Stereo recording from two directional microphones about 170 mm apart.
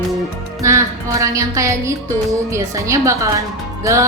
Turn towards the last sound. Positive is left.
turn(degrees=-15)  # may be behind; listen again after turning